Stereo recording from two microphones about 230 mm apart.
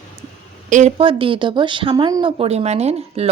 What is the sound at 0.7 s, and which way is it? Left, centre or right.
Speech, right.